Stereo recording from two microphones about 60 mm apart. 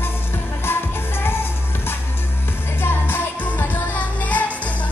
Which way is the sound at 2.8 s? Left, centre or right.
Left.